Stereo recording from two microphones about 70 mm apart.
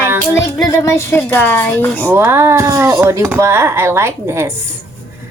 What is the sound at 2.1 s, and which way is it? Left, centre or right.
A woman's voice, right.